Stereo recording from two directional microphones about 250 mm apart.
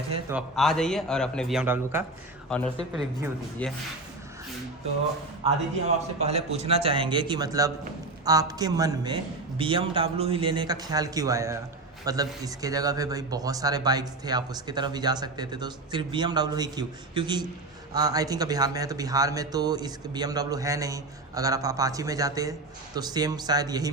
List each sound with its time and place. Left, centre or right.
0.3 s a man's voice: centre
2.5 s a man's voice: centre
6.1 s a man's voice: right